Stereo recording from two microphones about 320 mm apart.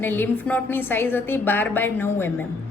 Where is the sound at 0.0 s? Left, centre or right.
Centre.